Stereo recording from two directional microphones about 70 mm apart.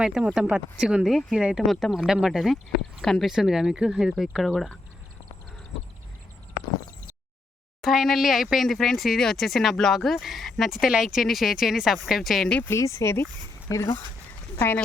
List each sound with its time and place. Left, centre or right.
0.0 s speech: centre
1.6 s speech: centre
1.9 s speech: centre
3.3 s speech: centre
7.8 s speech: centre
12.6 s speech: left